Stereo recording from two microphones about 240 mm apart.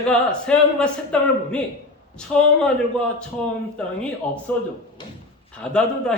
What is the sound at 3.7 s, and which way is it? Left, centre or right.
Speech, centre.